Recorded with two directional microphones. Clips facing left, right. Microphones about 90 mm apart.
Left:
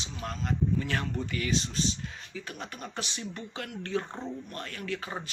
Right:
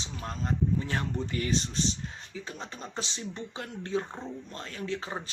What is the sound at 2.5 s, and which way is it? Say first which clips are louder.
Speech: left 1 dB; 25° right (ahead or behind).